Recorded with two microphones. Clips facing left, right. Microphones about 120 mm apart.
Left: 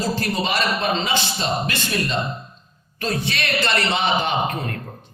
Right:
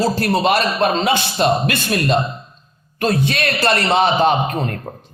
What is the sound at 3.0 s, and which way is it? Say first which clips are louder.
A man's voice: right 7 dB; 50° right (ahead or behind).